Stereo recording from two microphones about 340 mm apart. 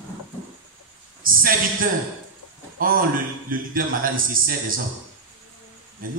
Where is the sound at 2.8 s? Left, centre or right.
Right.